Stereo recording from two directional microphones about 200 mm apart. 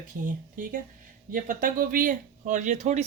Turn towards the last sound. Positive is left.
turn(degrees=-35)  # may be behind; listen again after turning